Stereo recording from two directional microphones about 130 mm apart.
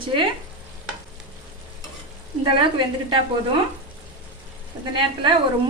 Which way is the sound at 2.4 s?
40° right (ahead or behind).